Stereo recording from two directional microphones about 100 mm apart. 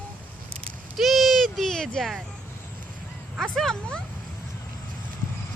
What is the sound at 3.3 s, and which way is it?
Speech, 5° left (ahead or behind).